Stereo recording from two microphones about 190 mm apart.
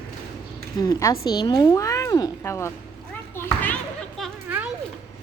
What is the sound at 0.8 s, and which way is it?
A woman's voice, 15° left (ahead or behind).